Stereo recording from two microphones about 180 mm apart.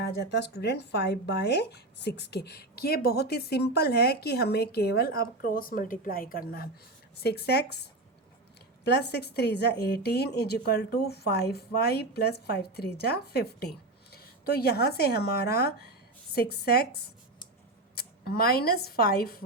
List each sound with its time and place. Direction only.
0.0 s speech: 65° left (ahead or behind)
17.9 s speech: 60° left (ahead or behind)